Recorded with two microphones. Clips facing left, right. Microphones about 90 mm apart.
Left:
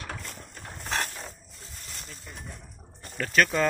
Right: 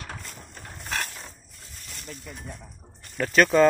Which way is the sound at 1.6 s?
30° left (ahead or behind).